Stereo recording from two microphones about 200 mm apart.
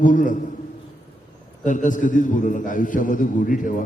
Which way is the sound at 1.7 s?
40° left (ahead or behind).